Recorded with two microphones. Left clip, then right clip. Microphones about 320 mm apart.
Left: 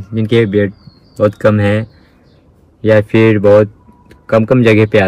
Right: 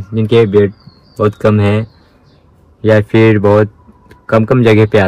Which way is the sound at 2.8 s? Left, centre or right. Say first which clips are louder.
Even; centre.